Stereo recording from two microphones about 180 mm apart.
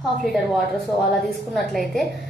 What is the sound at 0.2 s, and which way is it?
A woman's voice, centre (ahead or behind).